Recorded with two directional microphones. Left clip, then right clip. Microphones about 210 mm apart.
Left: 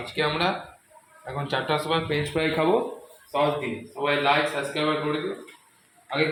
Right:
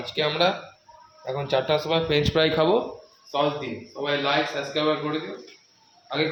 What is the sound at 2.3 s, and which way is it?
Speech, 35° right (ahead or behind).